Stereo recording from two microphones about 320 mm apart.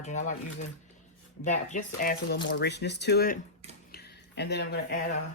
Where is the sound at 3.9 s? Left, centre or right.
Left.